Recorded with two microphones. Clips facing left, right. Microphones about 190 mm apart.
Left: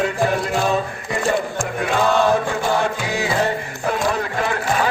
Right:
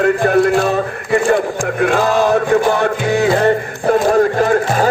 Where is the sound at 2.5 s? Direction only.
60° right (ahead or behind).